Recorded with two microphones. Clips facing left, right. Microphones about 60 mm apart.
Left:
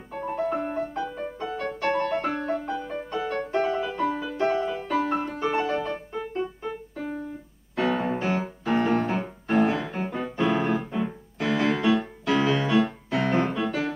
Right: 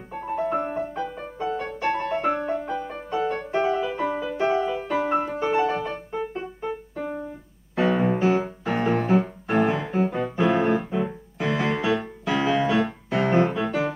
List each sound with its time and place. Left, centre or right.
0.1 s music: centre
6.1 s keyboard: centre
7.7 s music: centre